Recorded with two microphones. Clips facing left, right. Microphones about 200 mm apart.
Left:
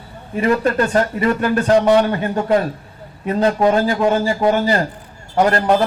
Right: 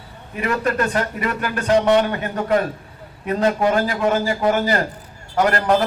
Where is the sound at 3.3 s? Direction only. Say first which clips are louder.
Left 3 dB; 30° left (ahead or behind).